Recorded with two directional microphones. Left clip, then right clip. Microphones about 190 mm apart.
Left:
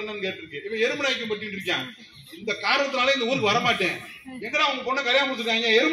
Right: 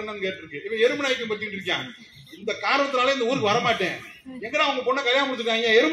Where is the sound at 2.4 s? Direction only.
10° left (ahead or behind).